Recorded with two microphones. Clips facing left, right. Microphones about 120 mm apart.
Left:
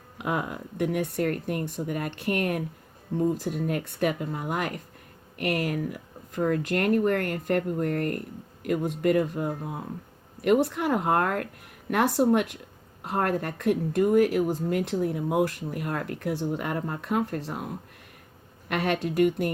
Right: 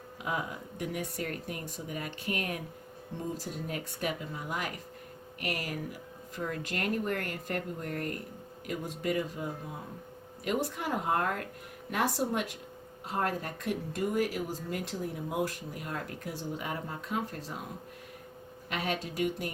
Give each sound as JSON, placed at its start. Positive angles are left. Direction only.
{"t": 0.2, "sound": "speech", "side_deg": 60}
{"t": 18.7, "sound": "speech", "side_deg": 60}